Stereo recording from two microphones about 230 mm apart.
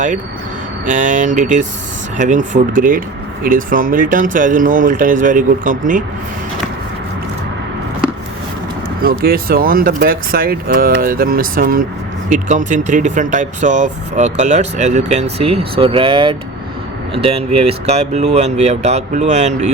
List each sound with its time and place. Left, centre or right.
0.9 s speech: right
9.0 s speech: right